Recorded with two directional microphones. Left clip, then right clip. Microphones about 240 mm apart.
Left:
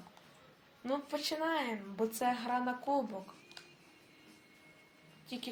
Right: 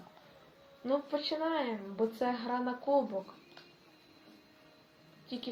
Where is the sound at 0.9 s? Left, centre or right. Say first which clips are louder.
Right 4 dB; left.